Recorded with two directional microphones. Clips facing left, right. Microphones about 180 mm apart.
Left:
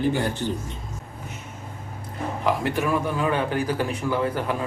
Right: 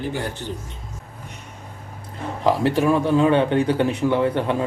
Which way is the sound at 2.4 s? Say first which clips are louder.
Right 6 dB; 30° right (ahead or behind).